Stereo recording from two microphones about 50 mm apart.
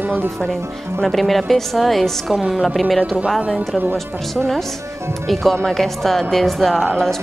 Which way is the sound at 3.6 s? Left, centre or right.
Right.